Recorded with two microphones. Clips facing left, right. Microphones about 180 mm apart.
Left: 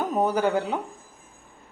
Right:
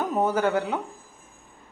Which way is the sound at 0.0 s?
10° left (ahead or behind).